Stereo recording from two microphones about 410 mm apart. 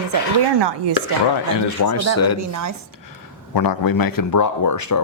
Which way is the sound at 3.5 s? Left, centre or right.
Left.